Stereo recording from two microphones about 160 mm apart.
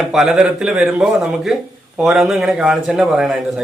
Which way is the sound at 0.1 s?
5° right (ahead or behind).